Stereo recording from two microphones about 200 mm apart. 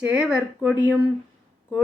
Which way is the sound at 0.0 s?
5° right (ahead or behind).